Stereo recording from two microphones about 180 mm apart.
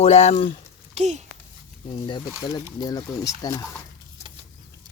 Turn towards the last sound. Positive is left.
turn(degrees=20)  # may be behind; listen again after turning